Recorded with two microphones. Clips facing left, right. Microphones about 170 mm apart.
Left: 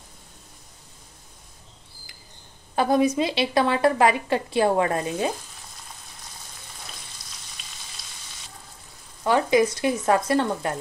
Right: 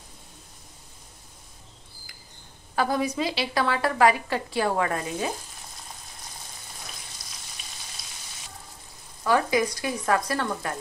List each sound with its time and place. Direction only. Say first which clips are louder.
2.7 s a woman's voice: left 5 dB; 20° left (ahead or behind)
9.2 s a woman's voice: left 3 dB; 25° left (ahead or behind)